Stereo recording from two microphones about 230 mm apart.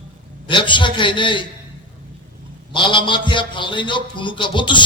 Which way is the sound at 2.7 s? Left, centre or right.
Left.